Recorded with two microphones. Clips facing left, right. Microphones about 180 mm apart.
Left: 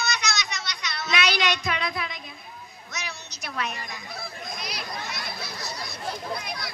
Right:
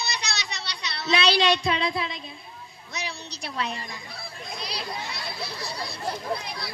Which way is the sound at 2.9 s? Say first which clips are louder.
Right 3 dB; 30° right (ahead or behind).